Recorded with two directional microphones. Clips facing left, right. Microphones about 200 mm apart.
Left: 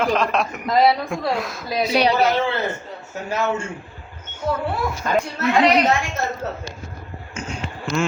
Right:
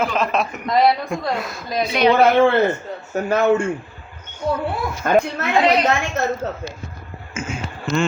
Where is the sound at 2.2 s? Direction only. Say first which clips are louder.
Right 6 dB; 55° right (ahead or behind).